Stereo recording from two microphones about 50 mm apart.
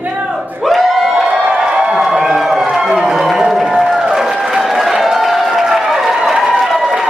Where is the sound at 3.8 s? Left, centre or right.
Centre.